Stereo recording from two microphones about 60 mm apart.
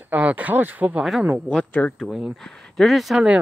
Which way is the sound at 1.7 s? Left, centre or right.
Left.